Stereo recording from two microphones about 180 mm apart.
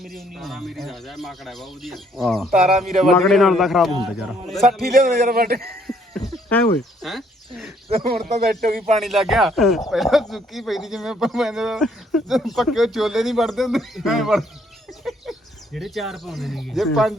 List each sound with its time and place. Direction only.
0.0 s speech: centre (ahead or behind)
5.3 s a man's voice: 55° right (ahead or behind)
5.5 s a sound: centre (ahead or behind)
6.5 s speech: 5° left (ahead or behind)
8.0 s a man's voice: 55° right (ahead or behind)
9.0 s speech: centre (ahead or behind)